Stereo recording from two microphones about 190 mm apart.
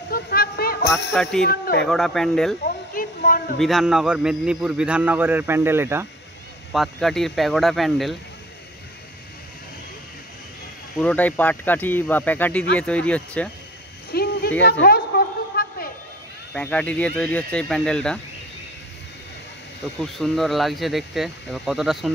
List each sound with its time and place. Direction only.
0.1 s a sound: 55° left (ahead or behind)
1.1 s a man's voice: centre (ahead or behind)
1.5 s a man's voice: 55° left (ahead or behind)
1.9 s a man's voice: centre (ahead or behind)
2.6 s a sound: 45° left (ahead or behind)
3.5 s a man's voice: centre (ahead or behind)
6.7 s a man's voice: centre (ahead or behind)
11.0 s speech: 5° left (ahead or behind)
14.1 s a sound: 55° left (ahead or behind)
16.5 s a man's voice: 5° left (ahead or behind)
20.0 s a man's voice: centre (ahead or behind)